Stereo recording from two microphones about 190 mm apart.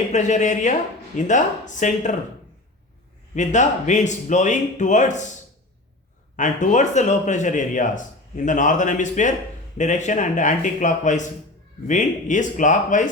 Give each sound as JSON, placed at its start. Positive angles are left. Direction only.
{"t": 0.1, "sound": "speech", "side_deg": 40}
{"t": 3.3, "sound": "speech", "side_deg": 40}
{"t": 6.3, "sound": "speech", "side_deg": 40}